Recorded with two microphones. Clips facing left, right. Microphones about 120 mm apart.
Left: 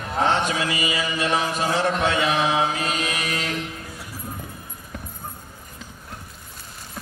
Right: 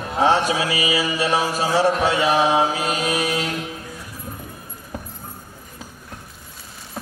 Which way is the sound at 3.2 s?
5° right (ahead or behind).